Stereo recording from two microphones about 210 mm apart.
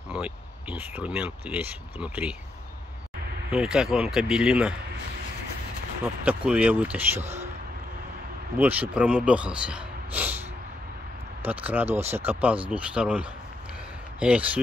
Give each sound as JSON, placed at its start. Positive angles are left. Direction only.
{"t": 0.1, "sound": "speech", "side_deg": -5}
{"t": 3.5, "sound": "a man's voice", "side_deg": -5}
{"t": 6.2, "sound": "speech", "side_deg": -5}
{"t": 7.2, "sound": "speech", "side_deg": -30}
{"t": 8.5, "sound": "a man's voice", "side_deg": -10}
{"t": 11.4, "sound": "a man's voice", "side_deg": -10}